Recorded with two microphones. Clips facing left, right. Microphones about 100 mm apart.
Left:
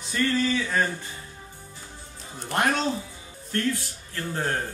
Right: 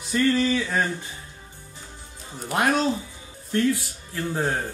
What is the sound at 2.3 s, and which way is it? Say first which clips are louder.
Speech: right 2 dB; 5° right (ahead or behind).